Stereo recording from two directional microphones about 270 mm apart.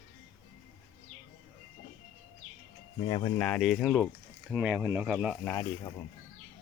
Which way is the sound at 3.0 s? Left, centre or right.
Centre.